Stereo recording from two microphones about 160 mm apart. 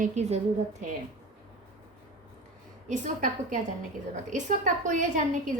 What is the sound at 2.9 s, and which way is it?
A woman's voice, 50° right (ahead or behind).